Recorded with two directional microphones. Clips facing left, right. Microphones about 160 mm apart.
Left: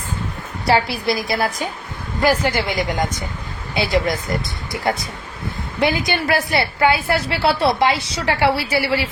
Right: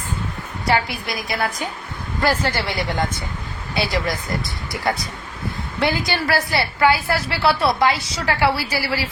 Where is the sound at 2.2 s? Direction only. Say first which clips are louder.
Left 3 dB; 15° left (ahead or behind).